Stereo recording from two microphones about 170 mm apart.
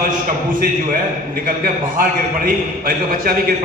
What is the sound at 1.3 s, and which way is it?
A man's voice, 55° right (ahead or behind).